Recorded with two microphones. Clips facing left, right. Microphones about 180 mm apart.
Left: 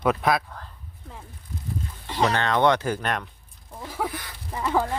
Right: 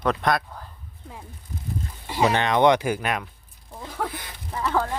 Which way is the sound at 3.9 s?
5° left (ahead or behind).